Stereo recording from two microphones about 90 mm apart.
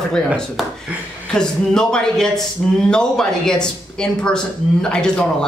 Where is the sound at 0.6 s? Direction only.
Centre (ahead or behind).